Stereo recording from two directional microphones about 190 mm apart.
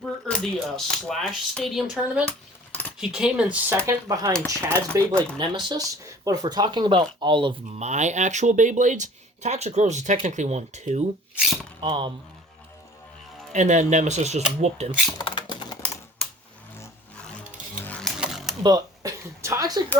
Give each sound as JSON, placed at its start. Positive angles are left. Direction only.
{"t": 0.3, "sound": "speech", "side_deg": 5}
{"t": 3.8, "sound": "speech", "side_deg": -20}
{"t": 5.1, "sound": "speech", "side_deg": 5}
{"t": 5.4, "sound": "speech", "side_deg": -25}
{"t": 7.9, "sound": "speech", "side_deg": -40}
{"t": 11.8, "sound": "speech", "side_deg": -25}
{"t": 13.5, "sound": "speech", "side_deg": -40}
{"t": 15.2, "sound": "typing", "side_deg": 25}
{"t": 17.7, "sound": "chainsaw", "side_deg": 10}
{"t": 18.2, "sound": "mechanisms", "side_deg": 0}
{"t": 18.6, "sound": "speech", "side_deg": -20}